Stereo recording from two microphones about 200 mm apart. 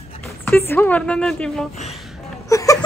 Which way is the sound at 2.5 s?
15° left (ahead or behind).